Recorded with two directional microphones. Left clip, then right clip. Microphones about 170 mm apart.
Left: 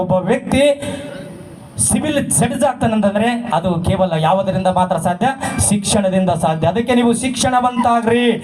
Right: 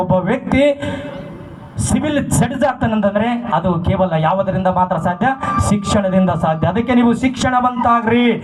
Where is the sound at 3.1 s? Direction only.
45° left (ahead or behind).